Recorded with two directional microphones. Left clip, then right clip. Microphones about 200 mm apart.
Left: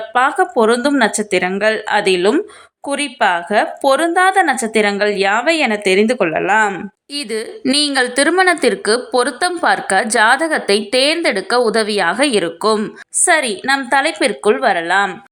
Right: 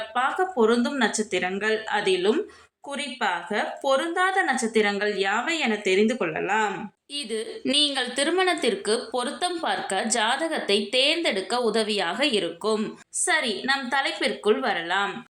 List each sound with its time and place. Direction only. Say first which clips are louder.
0.1 s a woman's voice: left 11 dB; 40° left (ahead or behind)